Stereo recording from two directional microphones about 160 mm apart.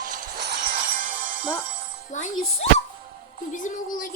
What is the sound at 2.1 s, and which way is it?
Music, 50° left (ahead or behind).